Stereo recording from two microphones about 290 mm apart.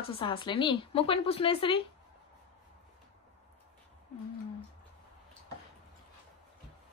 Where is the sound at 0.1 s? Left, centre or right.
Centre.